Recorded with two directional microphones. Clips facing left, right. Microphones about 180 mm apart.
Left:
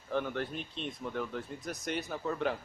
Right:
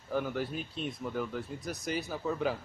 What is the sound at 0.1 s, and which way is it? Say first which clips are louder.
Speech: right 1 dB; 5° right (ahead or behind).